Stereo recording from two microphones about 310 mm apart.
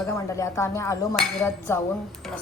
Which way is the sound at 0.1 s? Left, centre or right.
Centre.